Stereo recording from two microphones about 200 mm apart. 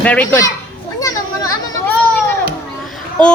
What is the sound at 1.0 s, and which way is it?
Children playing, 15° left (ahead or behind).